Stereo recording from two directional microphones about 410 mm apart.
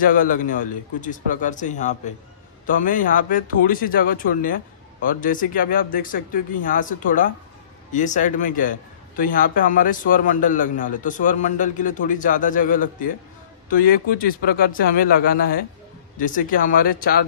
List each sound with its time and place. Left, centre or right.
0.0 s a man's voice: centre